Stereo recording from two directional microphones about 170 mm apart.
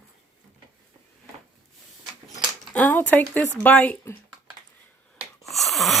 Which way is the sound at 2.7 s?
10° left (ahead or behind).